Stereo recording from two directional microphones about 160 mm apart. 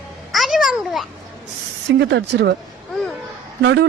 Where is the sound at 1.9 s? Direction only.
90° right.